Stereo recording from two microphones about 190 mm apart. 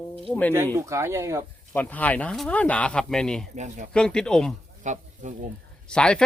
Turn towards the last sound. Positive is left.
turn(degrees=5)  # may be behind; listen again after turning